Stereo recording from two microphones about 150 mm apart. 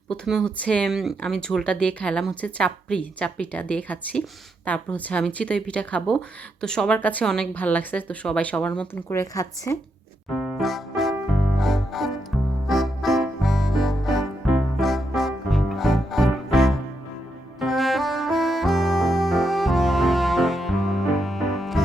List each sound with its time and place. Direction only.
0.1 s speech: 5° left (ahead or behind)
9.1 s speech: 20° left (ahead or behind)
10.4 s keyboard: centre (ahead or behind)
11.5 s music: centre (ahead or behind)